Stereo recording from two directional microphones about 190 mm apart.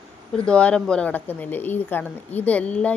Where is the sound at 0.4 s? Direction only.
5° left (ahead or behind).